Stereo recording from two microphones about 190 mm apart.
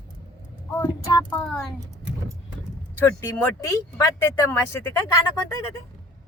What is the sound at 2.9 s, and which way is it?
Speech, 15° left (ahead or behind).